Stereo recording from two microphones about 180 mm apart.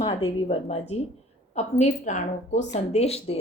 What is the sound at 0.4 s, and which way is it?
Speech, 35° left (ahead or behind).